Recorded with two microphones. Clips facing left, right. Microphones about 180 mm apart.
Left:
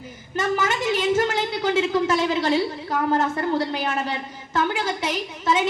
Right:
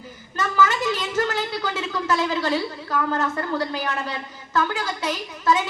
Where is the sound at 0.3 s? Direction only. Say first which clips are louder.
Right 1 dB; 25° left (ahead or behind).